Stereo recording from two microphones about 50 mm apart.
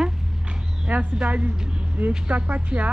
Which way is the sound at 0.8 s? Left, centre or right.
Right.